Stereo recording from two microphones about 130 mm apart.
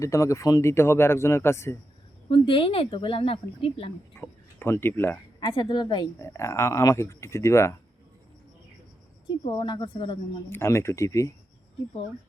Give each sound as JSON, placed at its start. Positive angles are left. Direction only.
{"t": 0.0, "sound": "speech", "side_deg": 25}
{"t": 2.3, "sound": "speech", "side_deg": 40}
{"t": 4.1, "sound": "speech", "side_deg": 20}
{"t": 5.4, "sound": "speech", "side_deg": 35}
{"t": 6.1, "sound": "speech", "side_deg": 20}
{"t": 9.2, "sound": "speech", "side_deg": 40}
{"t": 10.5, "sound": "speech", "side_deg": 20}